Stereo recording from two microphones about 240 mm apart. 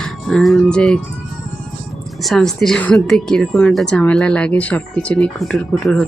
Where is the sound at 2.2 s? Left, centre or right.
Centre.